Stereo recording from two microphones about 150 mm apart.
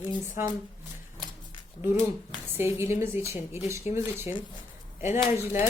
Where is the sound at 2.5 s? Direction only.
15° right (ahead or behind).